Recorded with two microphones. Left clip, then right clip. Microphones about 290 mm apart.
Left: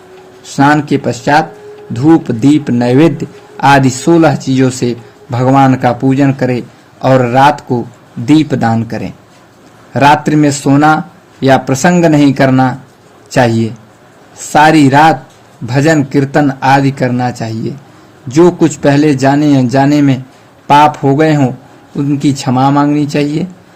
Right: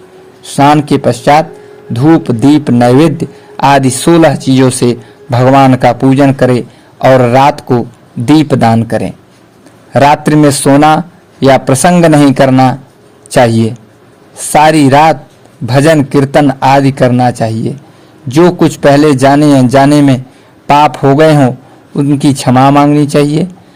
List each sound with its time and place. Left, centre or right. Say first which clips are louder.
0.4 s speech: right 3 dB; right